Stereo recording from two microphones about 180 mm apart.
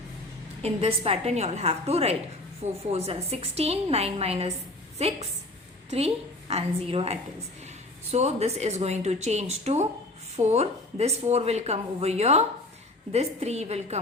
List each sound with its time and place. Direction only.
0.6 s speech: 35° right (ahead or behind)
6.5 s speech: 35° right (ahead or behind)